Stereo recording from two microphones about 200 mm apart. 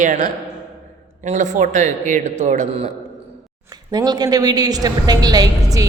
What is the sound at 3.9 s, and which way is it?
A woman's voice, 20° right (ahead or behind).